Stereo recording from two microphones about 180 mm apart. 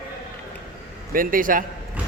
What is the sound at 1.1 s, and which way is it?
Speech, 50° right (ahead or behind).